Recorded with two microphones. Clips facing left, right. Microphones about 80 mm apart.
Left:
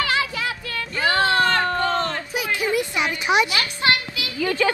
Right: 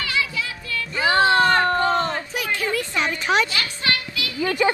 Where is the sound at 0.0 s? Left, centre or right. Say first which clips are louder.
Left 3 dB; left.